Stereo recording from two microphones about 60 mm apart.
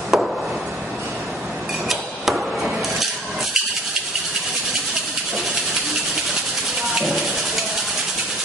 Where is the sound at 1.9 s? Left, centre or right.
Centre.